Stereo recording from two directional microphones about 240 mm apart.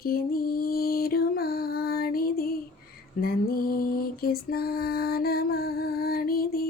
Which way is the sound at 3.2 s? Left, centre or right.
Left.